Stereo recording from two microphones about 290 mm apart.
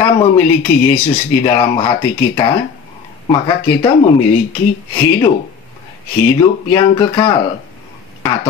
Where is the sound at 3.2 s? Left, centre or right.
Centre.